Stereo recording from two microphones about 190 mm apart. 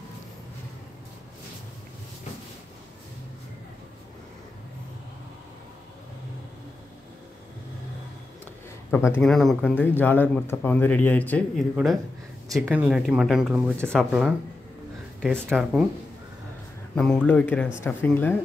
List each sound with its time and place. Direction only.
8.9 s a man's voice: 10° left (ahead or behind)
12.4 s speech: 15° right (ahead or behind)
16.9 s a man's voice: 5° left (ahead or behind)